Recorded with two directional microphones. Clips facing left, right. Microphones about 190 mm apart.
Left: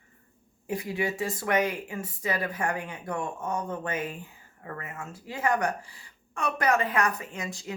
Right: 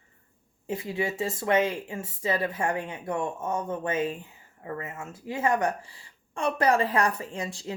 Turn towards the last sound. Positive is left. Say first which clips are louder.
# right 3 dB
turn(degrees=-30)  # may be behind; listen again after turning